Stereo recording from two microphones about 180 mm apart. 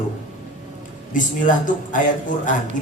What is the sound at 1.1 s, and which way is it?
A woman's voice, 45° left (ahead or behind).